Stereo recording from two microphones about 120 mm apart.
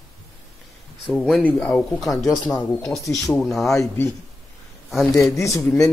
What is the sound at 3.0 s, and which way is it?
Speech, 25° left (ahead or behind).